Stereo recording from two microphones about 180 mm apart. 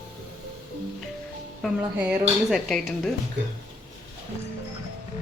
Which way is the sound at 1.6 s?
5° right (ahead or behind).